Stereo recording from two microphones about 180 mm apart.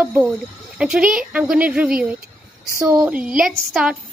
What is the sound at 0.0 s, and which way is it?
Speech, 10° right (ahead or behind).